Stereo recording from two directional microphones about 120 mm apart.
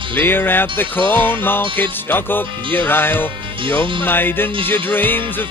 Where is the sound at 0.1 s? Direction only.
20° left (ahead or behind).